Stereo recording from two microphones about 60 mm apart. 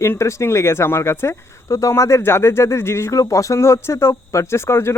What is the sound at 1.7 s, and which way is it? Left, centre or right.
Speech, left.